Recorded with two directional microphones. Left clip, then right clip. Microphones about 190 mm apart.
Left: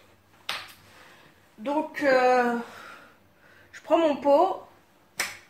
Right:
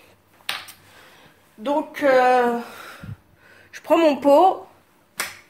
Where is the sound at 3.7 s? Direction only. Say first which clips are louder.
Right 5 dB; 40° right (ahead or behind).